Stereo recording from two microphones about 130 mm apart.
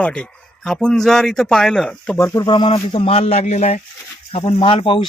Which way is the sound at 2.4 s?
40° left (ahead or behind).